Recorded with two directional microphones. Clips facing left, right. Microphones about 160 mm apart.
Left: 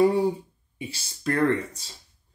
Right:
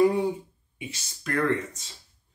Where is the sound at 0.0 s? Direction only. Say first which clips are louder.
Left 1 dB; 30° left (ahead or behind).